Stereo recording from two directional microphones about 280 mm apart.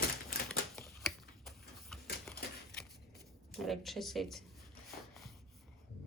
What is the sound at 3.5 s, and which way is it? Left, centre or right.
Speech, centre.